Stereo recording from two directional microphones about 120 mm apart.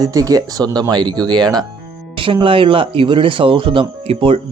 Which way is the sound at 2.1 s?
45° right (ahead or behind).